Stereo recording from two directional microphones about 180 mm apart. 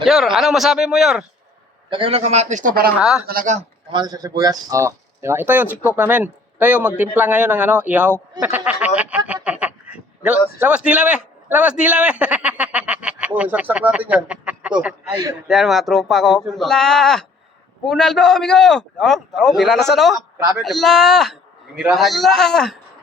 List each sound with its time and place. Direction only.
0.0 s a man's voice: centre (ahead or behind)
1.9 s a man's voice: 30° right (ahead or behind); by 2.9 s 50° right (ahead or behind)
3.0 s a man's voice: 5° right (ahead or behind)
3.2 s a man's voice: 45° right (ahead or behind)
3.9 s speech: 20° right (ahead or behind)
9.0 s a sound: 5° right (ahead or behind)
10.6 s a man's voice: 5° right (ahead or behind)